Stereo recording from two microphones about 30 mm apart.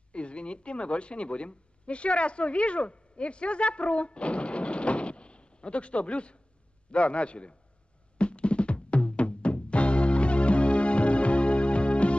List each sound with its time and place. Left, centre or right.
0.1 s a man's voice: left
8.2 s music: left